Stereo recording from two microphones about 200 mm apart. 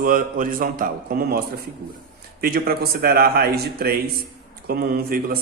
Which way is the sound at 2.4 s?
50° right (ahead or behind).